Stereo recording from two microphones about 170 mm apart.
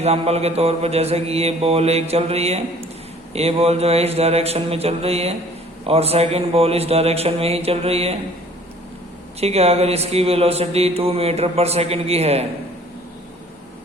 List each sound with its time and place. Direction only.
0.0 s speech: 40° right (ahead or behind)
9.4 s speech: 35° right (ahead or behind)